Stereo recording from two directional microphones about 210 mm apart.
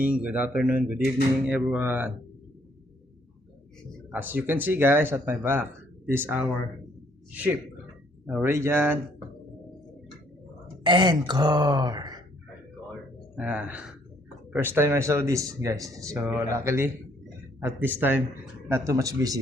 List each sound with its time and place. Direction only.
0.0 s speech: 5° right (ahead or behind)
4.1 s speech: 10° right (ahead or behind)
8.3 s speech: 10° right (ahead or behind)
10.8 s speech: 20° right (ahead or behind)
13.3 s speech: 5° right (ahead or behind)